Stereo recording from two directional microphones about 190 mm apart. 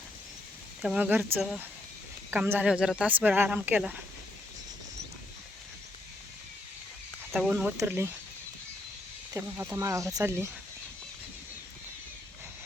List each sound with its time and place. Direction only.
0.8 s speech: 5° right (ahead or behind)
7.3 s speech: 5° right (ahead or behind)
9.3 s speech: 15° right (ahead or behind)